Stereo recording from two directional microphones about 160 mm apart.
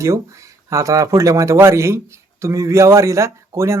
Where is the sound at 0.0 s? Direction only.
20° right (ahead or behind).